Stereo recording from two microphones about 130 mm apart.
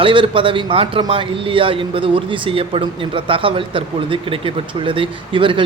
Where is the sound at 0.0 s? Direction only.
40° right (ahead or behind).